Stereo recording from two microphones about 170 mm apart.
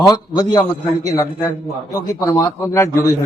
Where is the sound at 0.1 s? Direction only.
20° left (ahead or behind).